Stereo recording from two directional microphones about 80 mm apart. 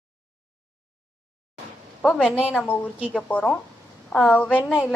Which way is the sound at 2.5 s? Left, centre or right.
Centre.